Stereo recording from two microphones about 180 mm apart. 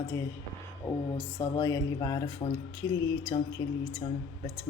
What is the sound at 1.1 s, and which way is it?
Speech, 20° left (ahead or behind).